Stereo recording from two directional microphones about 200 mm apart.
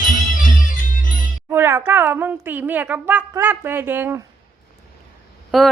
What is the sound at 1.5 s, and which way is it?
Speech, 10° right (ahead or behind).